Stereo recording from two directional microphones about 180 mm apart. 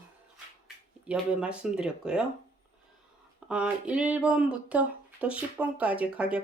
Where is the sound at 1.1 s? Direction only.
5° right (ahead or behind).